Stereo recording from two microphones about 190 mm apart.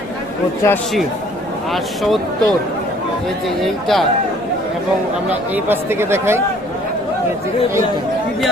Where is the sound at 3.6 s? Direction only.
Centre (ahead or behind).